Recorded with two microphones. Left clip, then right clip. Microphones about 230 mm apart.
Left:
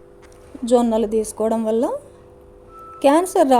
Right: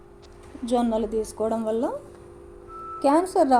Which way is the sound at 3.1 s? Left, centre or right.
Left.